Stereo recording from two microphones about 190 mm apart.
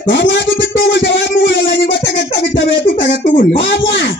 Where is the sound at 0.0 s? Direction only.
70° left (ahead or behind).